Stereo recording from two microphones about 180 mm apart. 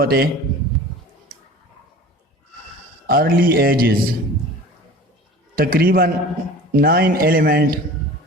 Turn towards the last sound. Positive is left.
turn(degrees=-55)  # may be behind; listen again after turning